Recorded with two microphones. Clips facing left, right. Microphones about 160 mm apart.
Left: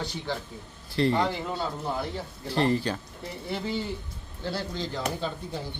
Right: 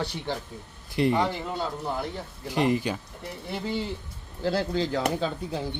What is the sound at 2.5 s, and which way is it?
Speech, 15° right (ahead or behind).